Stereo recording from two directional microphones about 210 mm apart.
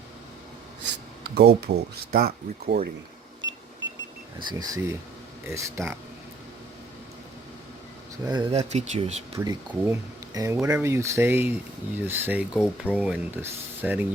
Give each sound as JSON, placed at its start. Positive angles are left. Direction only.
{"t": 1.4, "sound": "speech", "side_deg": -50}
{"t": 4.4, "sound": "speech", "side_deg": -20}
{"t": 8.2, "sound": "speech", "side_deg": -20}
{"t": 9.4, "sound": "speech", "side_deg": -15}